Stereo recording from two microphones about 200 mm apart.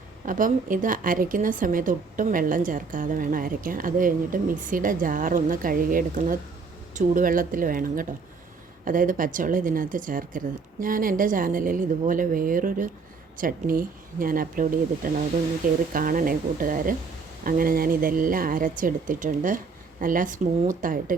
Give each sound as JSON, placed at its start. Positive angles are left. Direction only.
{"t": 0.3, "sound": "a woman's voice", "side_deg": -40}